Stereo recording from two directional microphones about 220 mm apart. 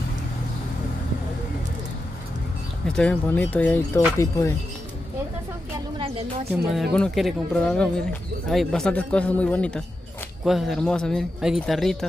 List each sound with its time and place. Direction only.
2.9 s speech: 5° left (ahead or behind)
5.9 s speech: 25° right (ahead or behind)
6.5 s speech: centre (ahead or behind)